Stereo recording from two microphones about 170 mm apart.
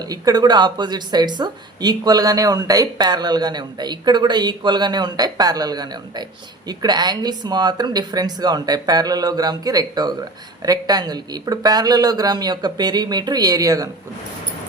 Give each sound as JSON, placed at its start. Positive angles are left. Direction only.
{"t": 0.0, "sound": "speech", "side_deg": -20}